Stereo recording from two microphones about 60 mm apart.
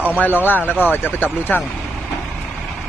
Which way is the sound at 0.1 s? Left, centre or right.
Left.